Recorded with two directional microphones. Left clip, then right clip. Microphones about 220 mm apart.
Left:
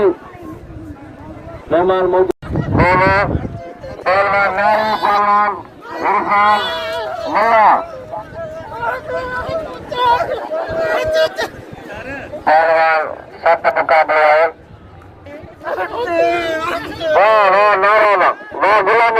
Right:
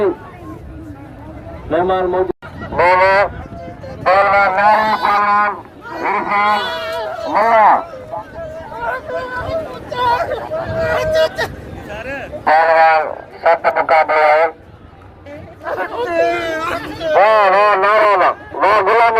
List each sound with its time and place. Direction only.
1.7 s speech: 40° left (ahead or behind)
2.7 s a sound: 40° right (ahead or behind)
6.1 s fowl: 25° right (ahead or behind)
6.5 s a sound: centre (ahead or behind)
7.4 s speech: centre (ahead or behind)
8.4 s a sound: 5° left (ahead or behind)
9.9 s speech: centre (ahead or behind)
11.9 s speech: 40° right (ahead or behind); by 14.5 s 25° right (ahead or behind)
15.6 s speech: centre (ahead or behind)
17.2 s fowl: 25° right (ahead or behind)